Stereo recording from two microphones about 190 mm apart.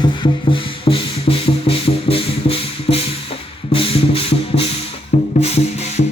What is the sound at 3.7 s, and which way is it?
Rub, 30° left (ahead or behind).